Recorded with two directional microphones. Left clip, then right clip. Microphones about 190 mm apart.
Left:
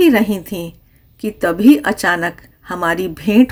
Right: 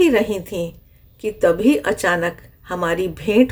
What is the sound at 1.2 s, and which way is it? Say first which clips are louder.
A woman's voice: left 1 dB; 20° left (ahead or behind).